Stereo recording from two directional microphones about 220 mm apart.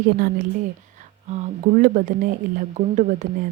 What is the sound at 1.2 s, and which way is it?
Speech, 30° right (ahead or behind).